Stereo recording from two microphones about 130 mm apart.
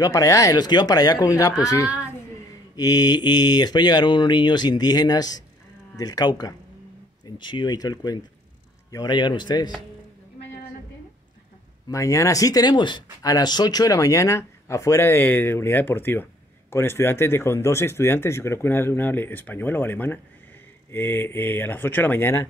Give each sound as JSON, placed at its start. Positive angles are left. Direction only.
{"t": 0.0, "sound": "speech", "side_deg": 25}
{"t": 11.9, "sound": "speech", "side_deg": 25}